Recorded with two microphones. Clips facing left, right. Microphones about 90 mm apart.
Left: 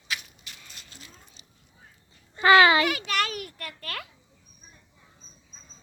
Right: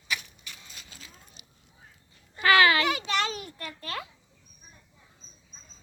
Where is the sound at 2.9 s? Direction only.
25° right (ahead or behind).